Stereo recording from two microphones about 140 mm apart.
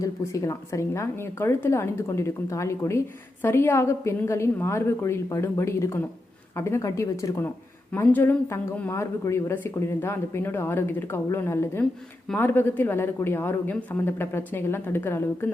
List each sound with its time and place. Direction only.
0.0 s speech: 25° left (ahead or behind)